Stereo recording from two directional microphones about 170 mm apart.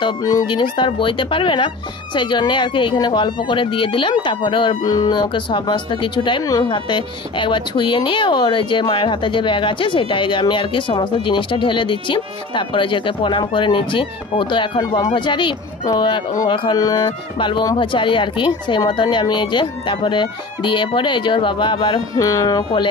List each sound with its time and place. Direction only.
0.0 s speech: 20° left (ahead or behind)